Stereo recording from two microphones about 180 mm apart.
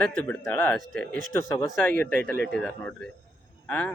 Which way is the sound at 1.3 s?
15° left (ahead or behind).